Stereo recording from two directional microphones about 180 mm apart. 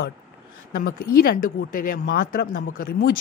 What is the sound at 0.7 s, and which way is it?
Speech, 50° left (ahead or behind).